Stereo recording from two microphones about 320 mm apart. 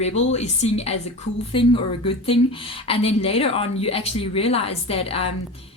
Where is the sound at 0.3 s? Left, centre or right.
Left.